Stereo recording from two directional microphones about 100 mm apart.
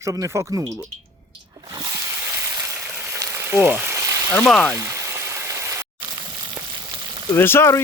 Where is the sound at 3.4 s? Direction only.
20° right (ahead or behind).